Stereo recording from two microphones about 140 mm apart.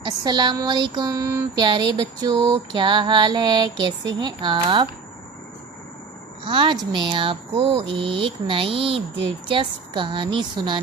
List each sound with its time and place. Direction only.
0.0 s a sound: 30° right (ahead or behind)
1.6 s female singing: 30° right (ahead or behind)
6.4 s female singing: 35° right (ahead or behind)